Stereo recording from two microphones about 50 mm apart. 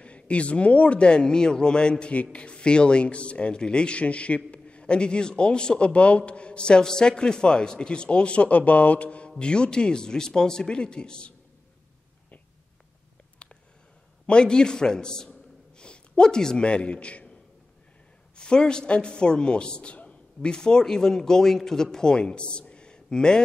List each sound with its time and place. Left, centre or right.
0.0 s a man's voice: left
13.4 s a sound: left
14.2 s a man's voice: centre
18.3 s a man's voice: centre